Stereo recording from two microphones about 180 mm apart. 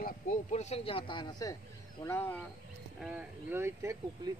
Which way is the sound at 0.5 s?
35° left (ahead or behind).